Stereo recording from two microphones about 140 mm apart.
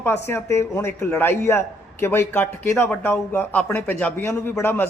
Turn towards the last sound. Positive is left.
turn(degrees=15)  # may be behind; listen again after turning